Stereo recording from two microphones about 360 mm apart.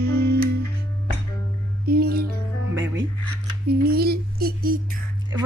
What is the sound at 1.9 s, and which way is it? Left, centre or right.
Music, right.